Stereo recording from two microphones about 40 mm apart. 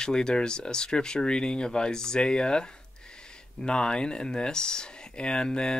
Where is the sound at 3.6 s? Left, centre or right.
Centre.